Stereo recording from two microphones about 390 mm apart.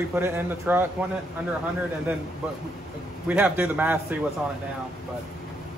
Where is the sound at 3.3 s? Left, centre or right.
Centre.